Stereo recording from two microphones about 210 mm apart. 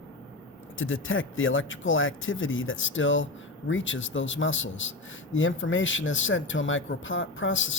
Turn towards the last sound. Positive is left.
turn(degrees=65)  # may be behind; listen again after turning